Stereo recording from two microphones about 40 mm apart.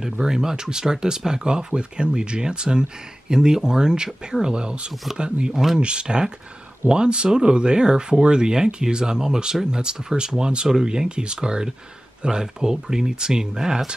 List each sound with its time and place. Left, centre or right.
0.0 s speech: centre